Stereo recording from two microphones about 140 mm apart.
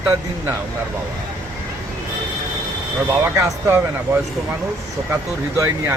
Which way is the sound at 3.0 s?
15° right (ahead or behind).